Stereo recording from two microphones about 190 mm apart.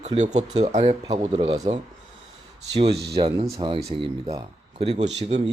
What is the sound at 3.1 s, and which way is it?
A man's voice, 25° right (ahead or behind).